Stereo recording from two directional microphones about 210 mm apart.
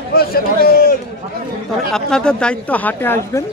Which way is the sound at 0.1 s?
45° left (ahead or behind).